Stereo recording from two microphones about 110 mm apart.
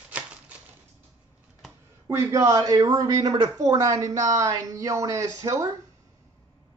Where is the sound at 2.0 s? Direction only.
25° right (ahead or behind).